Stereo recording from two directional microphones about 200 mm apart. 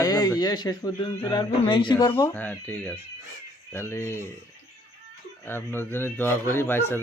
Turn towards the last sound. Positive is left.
turn(degrees=10)  # may be behind; listen again after turning